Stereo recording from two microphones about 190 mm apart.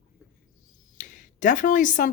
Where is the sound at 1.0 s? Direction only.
45° left (ahead or behind).